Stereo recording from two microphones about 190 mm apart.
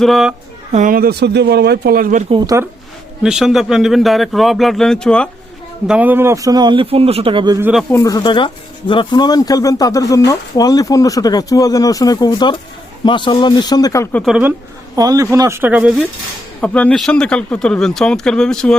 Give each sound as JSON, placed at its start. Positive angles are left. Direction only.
{"t": 0.0, "sound": "speech", "side_deg": 0}
{"t": 0.7, "sound": "speech", "side_deg": -45}
{"t": 2.3, "sound": "a man's voice", "side_deg": -20}
{"t": 3.2, "sound": "speech", "side_deg": 0}
{"t": 5.9, "sound": "a man's voice", "side_deg": -10}
{"t": 7.6, "sound": "speech", "side_deg": -5}
{"t": 7.9, "sound": "speech", "side_deg": 20}
{"t": 14.3, "sound": "speech", "side_deg": -5}
{"t": 14.9, "sound": "speech", "side_deg": -20}
{"t": 16.6, "sound": "speech", "side_deg": 5}